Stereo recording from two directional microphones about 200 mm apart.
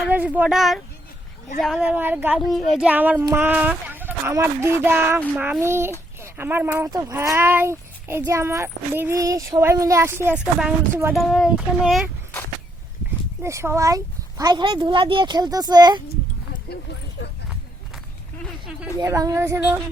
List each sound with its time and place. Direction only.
0.0 s speech: 5° right (ahead or behind)
2.0 s speech: 10° right (ahead or behind)
10.6 s speech: centre (ahead or behind)
13.4 s speech: 15° right (ahead or behind)
16.7 s speech: 55° left (ahead or behind)
17.2 s a sound: 60° left (ahead or behind)
18.9 s speech: 15° right (ahead or behind)